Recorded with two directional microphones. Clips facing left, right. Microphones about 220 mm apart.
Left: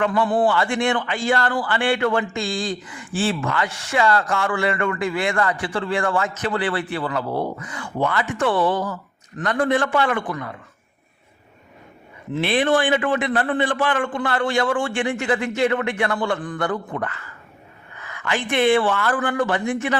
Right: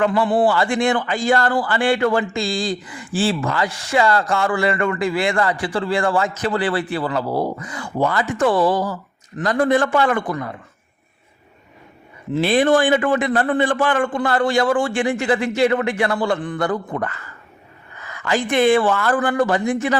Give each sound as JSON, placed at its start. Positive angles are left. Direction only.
{"t": 0.4, "sound": "a man's voice", "side_deg": -35}
{"t": 12.3, "sound": "a man's voice", "side_deg": -40}